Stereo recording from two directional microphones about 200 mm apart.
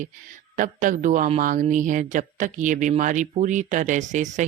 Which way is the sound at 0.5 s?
40° right (ahead or behind).